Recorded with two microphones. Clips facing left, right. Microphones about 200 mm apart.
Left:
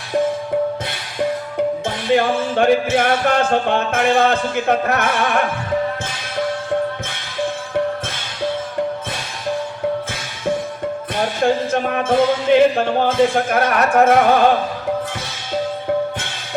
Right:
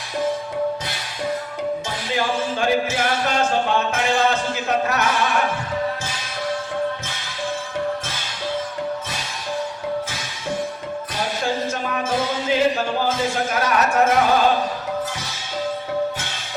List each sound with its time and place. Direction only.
1.5 s music: 55° left (ahead or behind)
11.7 s music: 55° left (ahead or behind)